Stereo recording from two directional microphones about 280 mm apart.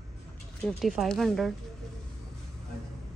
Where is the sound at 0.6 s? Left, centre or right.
Centre.